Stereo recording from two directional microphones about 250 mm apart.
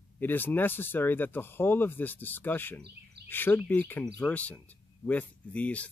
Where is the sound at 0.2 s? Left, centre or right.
Centre.